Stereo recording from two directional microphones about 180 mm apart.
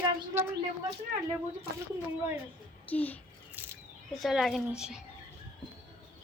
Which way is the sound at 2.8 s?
10° left (ahead or behind).